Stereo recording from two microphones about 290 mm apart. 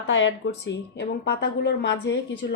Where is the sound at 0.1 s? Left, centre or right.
Left.